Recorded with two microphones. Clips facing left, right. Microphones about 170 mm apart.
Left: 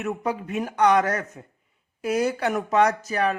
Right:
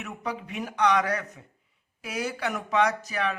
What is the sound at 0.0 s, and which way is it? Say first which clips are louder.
Speech: left 7 dB; 45° left (ahead or behind).